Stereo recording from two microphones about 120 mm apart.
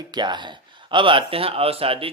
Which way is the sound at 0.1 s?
40° right (ahead or behind).